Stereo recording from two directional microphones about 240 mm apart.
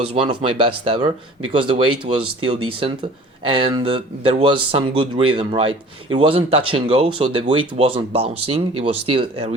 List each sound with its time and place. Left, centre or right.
0.0 s speech: right
1.5 s speech: right